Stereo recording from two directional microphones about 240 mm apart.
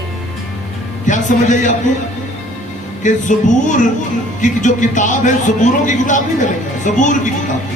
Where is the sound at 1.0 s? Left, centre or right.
Left.